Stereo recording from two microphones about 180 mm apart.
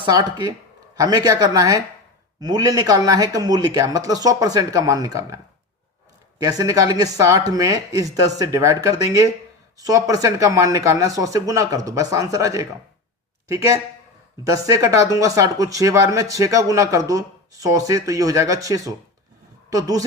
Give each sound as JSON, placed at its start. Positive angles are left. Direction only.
{"t": 0.0, "sound": "speech", "side_deg": -25}
{"t": 6.4, "sound": "speech", "side_deg": -20}